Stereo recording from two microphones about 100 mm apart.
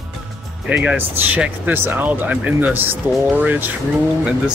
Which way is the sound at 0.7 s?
20° right (ahead or behind).